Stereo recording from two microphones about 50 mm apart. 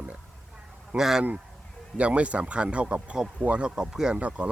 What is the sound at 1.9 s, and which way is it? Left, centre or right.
Speech, right.